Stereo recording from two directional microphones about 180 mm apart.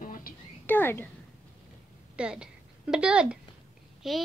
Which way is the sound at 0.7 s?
10° left (ahead or behind).